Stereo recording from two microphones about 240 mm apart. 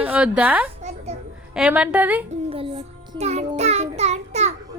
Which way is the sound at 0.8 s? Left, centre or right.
Right.